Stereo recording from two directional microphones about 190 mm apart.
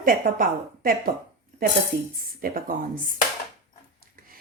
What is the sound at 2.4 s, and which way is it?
Speech, 50° right (ahead or behind).